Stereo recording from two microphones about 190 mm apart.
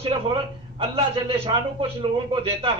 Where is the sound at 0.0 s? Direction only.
30° right (ahead or behind).